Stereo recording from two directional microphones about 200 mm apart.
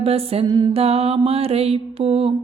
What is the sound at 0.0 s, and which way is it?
Music, 30° right (ahead or behind).